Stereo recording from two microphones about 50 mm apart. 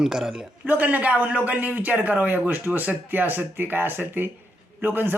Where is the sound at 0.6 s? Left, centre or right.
Right.